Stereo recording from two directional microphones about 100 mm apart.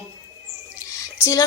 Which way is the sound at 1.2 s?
30° left (ahead or behind).